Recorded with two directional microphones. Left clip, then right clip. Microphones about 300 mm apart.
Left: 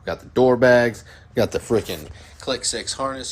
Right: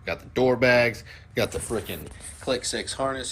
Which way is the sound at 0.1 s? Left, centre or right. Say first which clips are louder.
Left 5 dB; left.